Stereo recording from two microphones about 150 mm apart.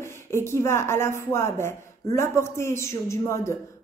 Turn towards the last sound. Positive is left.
turn(degrees=20)  # may be behind; listen again after turning